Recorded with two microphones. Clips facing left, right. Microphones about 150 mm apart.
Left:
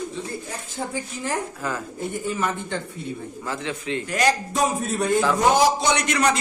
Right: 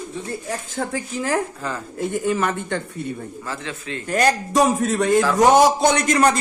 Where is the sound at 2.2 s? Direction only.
70° right (ahead or behind).